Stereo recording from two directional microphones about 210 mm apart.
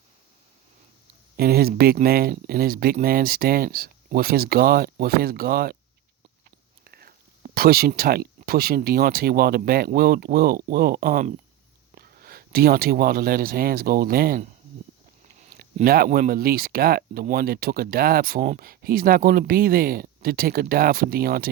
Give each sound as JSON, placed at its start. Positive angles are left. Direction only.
{"t": 1.4, "sound": "speech", "side_deg": -45}
{"t": 6.8, "sound": "speech", "side_deg": -45}